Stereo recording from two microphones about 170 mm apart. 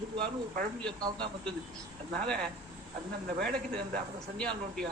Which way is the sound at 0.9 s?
25° right (ahead or behind).